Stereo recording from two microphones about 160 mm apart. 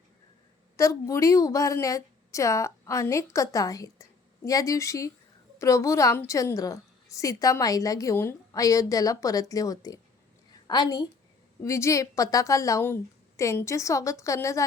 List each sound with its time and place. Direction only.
0.8 s a woman's voice: 20° left (ahead or behind)
10.5 s a sound: 25° left (ahead or behind)
11.6 s a woman's voice: 20° left (ahead or behind)